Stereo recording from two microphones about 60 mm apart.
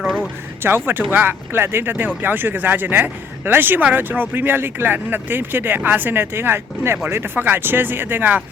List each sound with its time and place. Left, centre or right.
0.6 s speech: right